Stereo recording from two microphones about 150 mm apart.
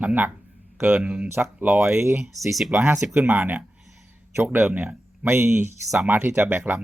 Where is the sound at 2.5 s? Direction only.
Centre (ahead or behind).